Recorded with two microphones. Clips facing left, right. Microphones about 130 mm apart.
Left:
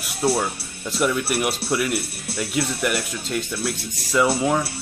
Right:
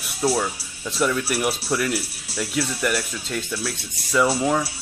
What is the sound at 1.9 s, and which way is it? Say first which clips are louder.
Speech: left 1 dB; 60° left (ahead or behind).